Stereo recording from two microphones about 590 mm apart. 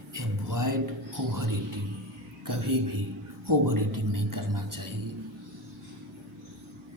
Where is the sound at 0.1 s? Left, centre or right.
Right.